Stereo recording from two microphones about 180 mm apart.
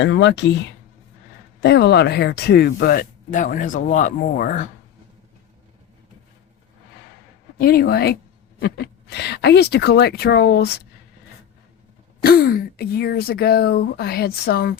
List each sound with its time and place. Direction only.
0.0 s speech: 85° left
1.6 s speech: 70° left (ahead or behind); by 4.7 s 50° left (ahead or behind)
7.6 s speech: 55° left (ahead or behind)
12.2 s speech: 55° left (ahead or behind)